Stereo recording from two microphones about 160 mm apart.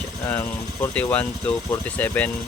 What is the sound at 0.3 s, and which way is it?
Speech, 10° left (ahead or behind).